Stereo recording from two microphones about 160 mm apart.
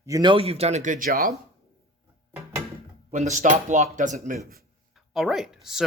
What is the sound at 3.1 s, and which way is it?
Speech, 50° right (ahead or behind).